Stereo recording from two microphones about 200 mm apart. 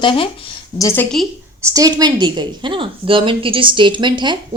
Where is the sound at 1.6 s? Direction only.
15° right (ahead or behind).